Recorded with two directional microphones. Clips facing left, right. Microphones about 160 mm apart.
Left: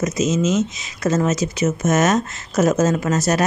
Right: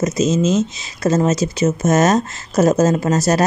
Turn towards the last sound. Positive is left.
turn(degrees=-35)  # may be behind; listen again after turning